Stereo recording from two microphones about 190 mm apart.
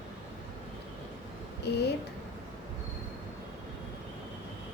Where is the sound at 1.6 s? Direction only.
60° left (ahead or behind).